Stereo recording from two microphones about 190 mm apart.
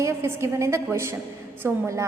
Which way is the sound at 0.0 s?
15° right (ahead or behind).